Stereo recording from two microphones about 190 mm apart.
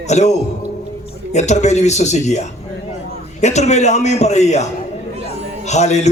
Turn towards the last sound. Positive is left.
turn(degrees=35)  # may be behind; listen again after turning